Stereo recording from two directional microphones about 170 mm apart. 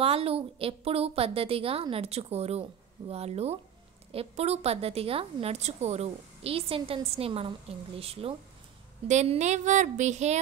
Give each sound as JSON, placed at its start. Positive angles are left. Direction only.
{"t": 0.0, "sound": "a woman's voice", "side_deg": -35}